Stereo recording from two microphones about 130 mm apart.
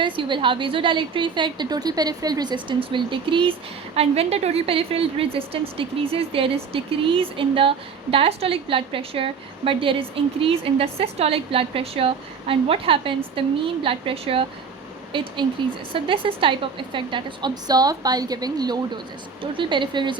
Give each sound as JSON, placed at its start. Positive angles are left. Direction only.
{"t": 0.0, "sound": "a woman's voice", "side_deg": -40}
{"t": 3.9, "sound": "a woman's voice", "side_deg": -50}